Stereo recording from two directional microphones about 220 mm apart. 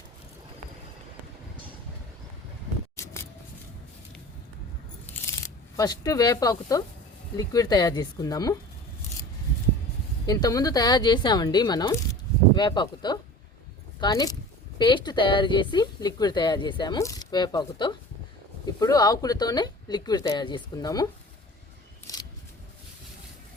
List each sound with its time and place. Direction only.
2.9 s scissors: 10° left (ahead or behind)
5.1 s coin: 5° left (ahead or behind)
5.7 s speech: 15° left (ahead or behind)
10.2 s speech: 15° left (ahead or behind)
22.0 s a sound: 15° left (ahead or behind)